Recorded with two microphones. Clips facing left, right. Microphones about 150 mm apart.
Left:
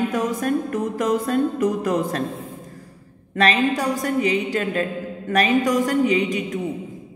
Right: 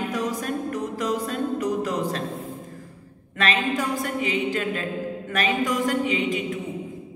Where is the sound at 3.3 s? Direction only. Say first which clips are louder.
Left 5 dB; 40° left (ahead or behind).